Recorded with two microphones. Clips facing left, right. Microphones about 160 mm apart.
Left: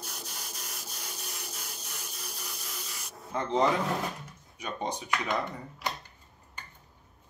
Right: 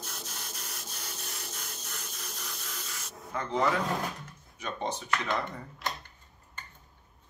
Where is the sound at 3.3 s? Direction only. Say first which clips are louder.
Left 3 dB; 25° left (ahead or behind).